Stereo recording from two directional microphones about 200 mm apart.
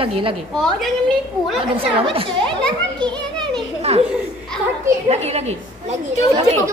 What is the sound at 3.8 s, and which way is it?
Speech, 30° right (ahead or behind).